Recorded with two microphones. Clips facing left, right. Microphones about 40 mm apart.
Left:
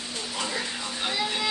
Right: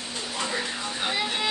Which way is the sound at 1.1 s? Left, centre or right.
Centre.